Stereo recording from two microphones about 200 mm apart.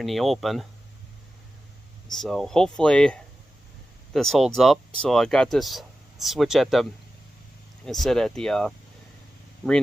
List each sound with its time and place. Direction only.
0.0 s speech: centre (ahead or behind)
2.1 s speech: centre (ahead or behind)
7.9 s speech: centre (ahead or behind)